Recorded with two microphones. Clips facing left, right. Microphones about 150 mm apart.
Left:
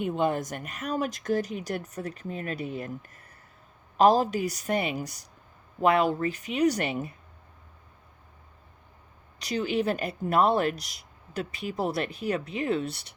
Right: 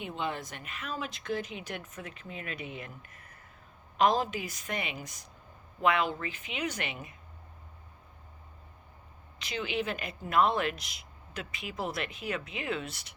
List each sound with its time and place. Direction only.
0.0 s speech: 45° left (ahead or behind)
9.4 s speech: 40° left (ahead or behind)